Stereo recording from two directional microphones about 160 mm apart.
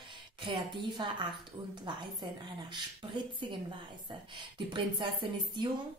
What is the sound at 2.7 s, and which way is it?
A woman's voice, 30° right (ahead or behind).